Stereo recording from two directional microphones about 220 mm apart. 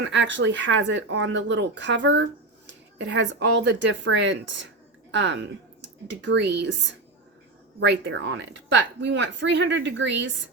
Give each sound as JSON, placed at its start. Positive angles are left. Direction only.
{"t": 0.0, "sound": "a woman's voice", "side_deg": -55}
{"t": 7.8, "sound": "a woman's voice", "side_deg": -55}